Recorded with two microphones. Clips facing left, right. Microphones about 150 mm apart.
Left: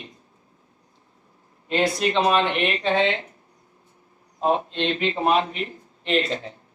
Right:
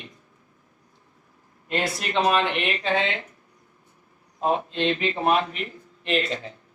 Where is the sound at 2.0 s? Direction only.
30° left (ahead or behind).